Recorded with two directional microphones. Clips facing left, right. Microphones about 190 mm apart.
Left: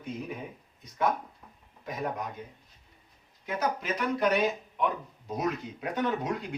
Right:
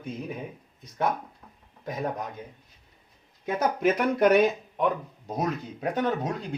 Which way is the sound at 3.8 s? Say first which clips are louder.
Right 7 dB; 55° right (ahead or behind).